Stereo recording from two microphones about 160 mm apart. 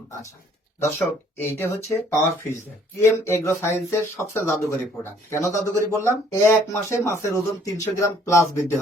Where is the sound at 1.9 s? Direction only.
15° left (ahead or behind).